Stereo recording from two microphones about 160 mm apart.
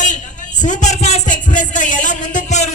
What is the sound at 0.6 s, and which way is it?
Music, 50° left (ahead or behind).